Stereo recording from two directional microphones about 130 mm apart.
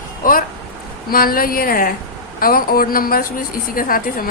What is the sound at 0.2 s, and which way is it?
A woman's voice, 90° left.